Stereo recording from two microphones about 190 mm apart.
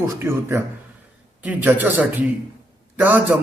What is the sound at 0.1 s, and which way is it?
A man's voice, 15° right (ahead or behind).